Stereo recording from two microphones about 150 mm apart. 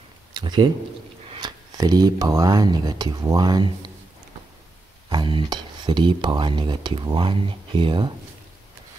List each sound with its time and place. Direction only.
0.3 s a sound: 30° right (ahead or behind)
1.3 s speech: 25° right (ahead or behind)
5.1 s speech: 30° right (ahead or behind)